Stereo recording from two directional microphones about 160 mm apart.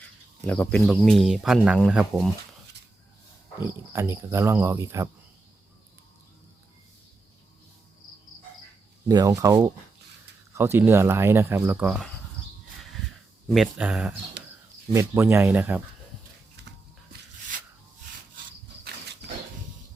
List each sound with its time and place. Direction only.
0.4 s speech: 5° left (ahead or behind)
3.9 s speech: 15° right (ahead or behind)
9.0 s speech: 25° right (ahead or behind)
13.5 s speech: 5° right (ahead or behind)
14.9 s speech: 15° right (ahead or behind)